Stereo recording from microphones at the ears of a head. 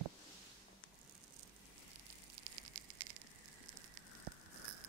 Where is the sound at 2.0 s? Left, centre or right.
Right.